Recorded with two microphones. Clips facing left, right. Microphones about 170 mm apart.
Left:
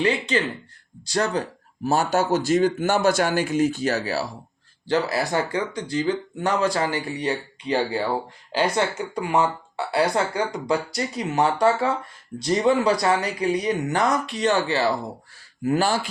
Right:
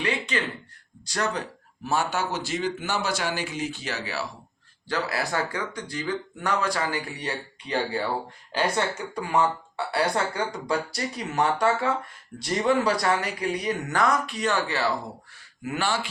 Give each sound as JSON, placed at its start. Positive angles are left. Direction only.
{"t": 0.0, "sound": "speech", "side_deg": 30}
{"t": 5.3, "sound": "a man's voice", "side_deg": 25}